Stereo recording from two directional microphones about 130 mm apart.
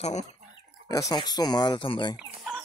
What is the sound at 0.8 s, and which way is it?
Speech, 30° left (ahead or behind).